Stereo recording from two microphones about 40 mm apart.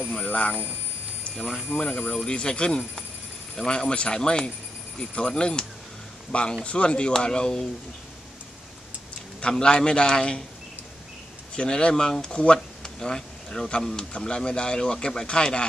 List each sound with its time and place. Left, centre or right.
0.3 s speech: left
1.3 s speech: centre
1.8 s speech: left
9.4 s speech: left
11.5 s speech: left
12.5 s a sound: centre
13.8 s speech: centre